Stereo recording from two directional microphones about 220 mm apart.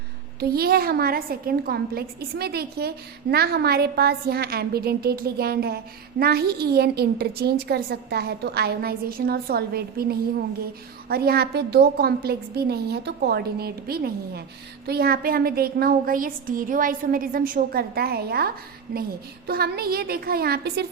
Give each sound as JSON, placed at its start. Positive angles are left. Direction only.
{"t": 0.3, "sound": "a woman's voice", "side_deg": -45}